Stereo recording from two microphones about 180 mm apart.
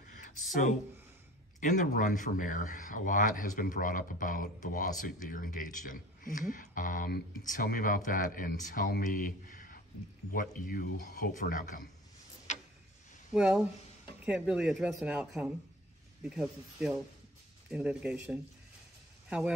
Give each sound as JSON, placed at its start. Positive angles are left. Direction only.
{"t": 0.2, "sound": "speech", "side_deg": 45}
{"t": 13.3, "sound": "speech", "side_deg": -5}